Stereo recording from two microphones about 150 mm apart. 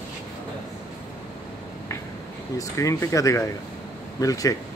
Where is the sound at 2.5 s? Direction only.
20° left (ahead or behind).